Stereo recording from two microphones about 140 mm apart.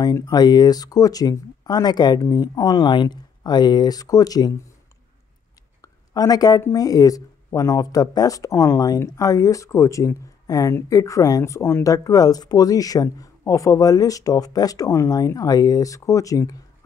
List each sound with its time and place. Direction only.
0.0 s speech: 30° left (ahead or behind)
5.8 s speech: 25° left (ahead or behind)